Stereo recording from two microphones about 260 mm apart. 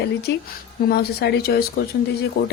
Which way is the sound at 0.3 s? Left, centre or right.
Left.